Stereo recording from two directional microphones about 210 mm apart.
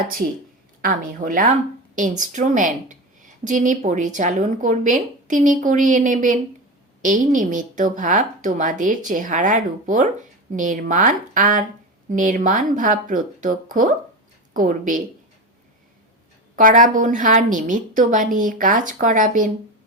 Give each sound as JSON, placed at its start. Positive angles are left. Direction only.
{"t": 0.8, "sound": "a woman's voice", "side_deg": -40}
{"t": 16.6, "sound": "a woman's voice", "side_deg": -40}